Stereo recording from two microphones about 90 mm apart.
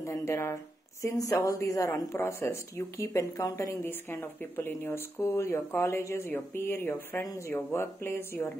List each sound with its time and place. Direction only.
0.0 s speech: 30° left (ahead or behind)
3.8 s speech: 25° left (ahead or behind)